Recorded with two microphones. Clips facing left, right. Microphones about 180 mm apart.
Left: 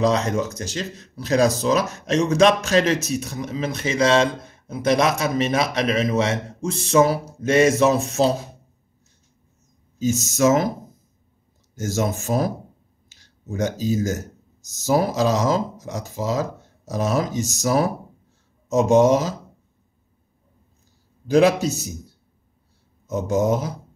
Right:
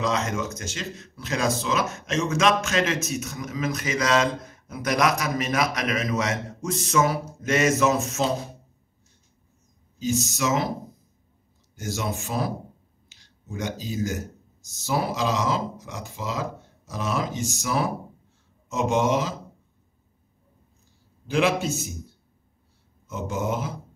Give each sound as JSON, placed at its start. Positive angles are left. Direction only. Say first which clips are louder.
{"t": 0.0, "sound": "speech", "louder": "left 6 dB", "side_deg": 35}
{"t": 9.9, "sound": "speech", "louder": "left 5 dB", "side_deg": 45}
{"t": 11.7, "sound": "speech", "louder": "left 6 dB", "side_deg": 45}
{"t": 21.3, "sound": "speech", "louder": "left 6 dB", "side_deg": 40}
{"t": 23.0, "sound": "speech", "louder": "left 8 dB", "side_deg": 40}